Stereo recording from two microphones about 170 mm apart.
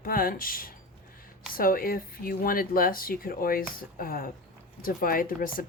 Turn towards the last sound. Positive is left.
turn(degrees=55)  # may be behind; listen again after turning